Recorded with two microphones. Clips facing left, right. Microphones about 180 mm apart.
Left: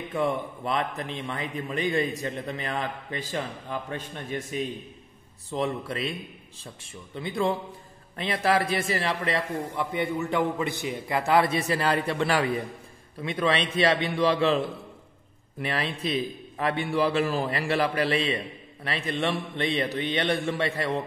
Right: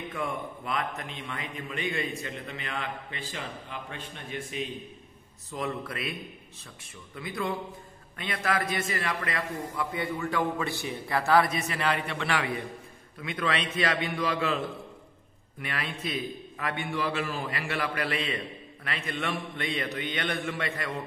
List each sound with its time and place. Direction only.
0.1 s a man's voice: 30° left (ahead or behind)
5.5 s a man's voice: 30° left (ahead or behind)
15.6 s a man's voice: 35° left (ahead or behind)